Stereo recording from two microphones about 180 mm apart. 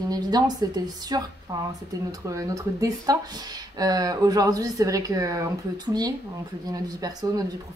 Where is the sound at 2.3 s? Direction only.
15° right (ahead or behind).